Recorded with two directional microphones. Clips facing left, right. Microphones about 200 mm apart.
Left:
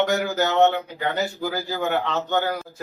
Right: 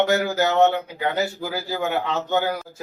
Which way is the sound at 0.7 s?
15° left (ahead or behind).